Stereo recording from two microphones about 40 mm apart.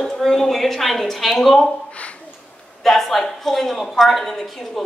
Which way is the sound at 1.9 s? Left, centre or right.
Left.